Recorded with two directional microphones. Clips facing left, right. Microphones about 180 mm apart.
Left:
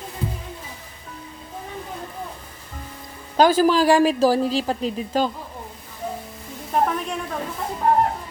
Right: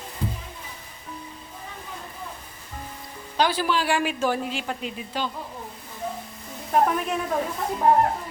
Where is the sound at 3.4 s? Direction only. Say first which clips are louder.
Left 7 dB; 45° left (ahead or behind).